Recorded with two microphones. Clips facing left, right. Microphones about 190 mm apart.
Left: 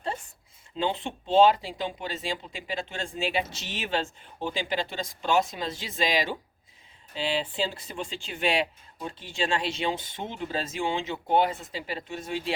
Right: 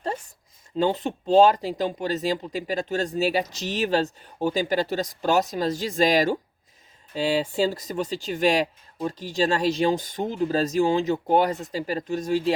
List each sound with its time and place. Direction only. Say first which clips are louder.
0.8 s speech: right 6 dB; 45° right (ahead or behind)